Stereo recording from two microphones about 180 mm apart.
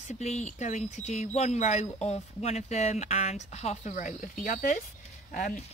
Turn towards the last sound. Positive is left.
turn(degrees=45)  # may be behind; listen again after turning